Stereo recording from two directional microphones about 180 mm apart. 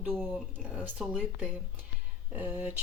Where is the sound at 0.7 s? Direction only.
5° right (ahead or behind).